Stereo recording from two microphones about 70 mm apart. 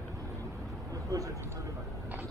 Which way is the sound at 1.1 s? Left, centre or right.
Right.